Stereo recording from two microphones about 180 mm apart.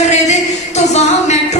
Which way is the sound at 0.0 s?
40° left (ahead or behind).